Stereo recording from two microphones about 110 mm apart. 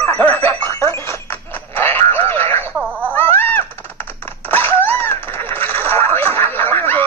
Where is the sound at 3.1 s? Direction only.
20° left (ahead or behind).